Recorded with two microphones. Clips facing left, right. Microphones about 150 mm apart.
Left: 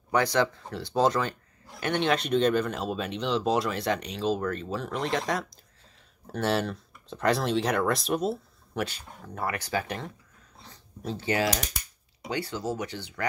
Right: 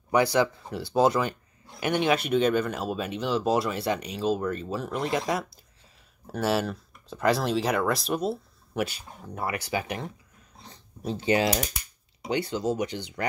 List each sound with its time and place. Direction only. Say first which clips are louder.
0.1 s speech: right 2 dB; 10° right (ahead or behind)